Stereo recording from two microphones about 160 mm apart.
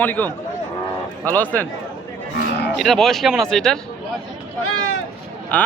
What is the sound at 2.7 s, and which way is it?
Speech, centre (ahead or behind).